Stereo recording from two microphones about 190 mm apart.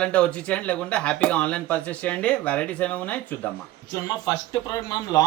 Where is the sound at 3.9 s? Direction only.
25° left (ahead or behind).